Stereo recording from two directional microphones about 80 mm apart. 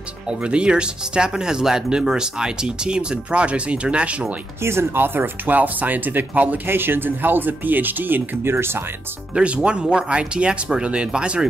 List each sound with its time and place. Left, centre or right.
0.3 s speech: centre
4.6 s speech: right
9.3 s speech: centre